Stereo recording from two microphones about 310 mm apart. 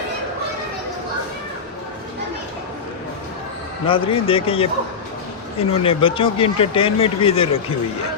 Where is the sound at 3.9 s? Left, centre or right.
Centre.